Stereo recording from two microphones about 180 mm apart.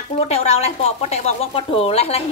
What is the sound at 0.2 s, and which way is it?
Speech, 35° left (ahead or behind).